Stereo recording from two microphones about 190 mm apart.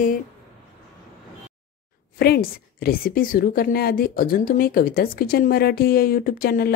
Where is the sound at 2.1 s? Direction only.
55° left (ahead or behind).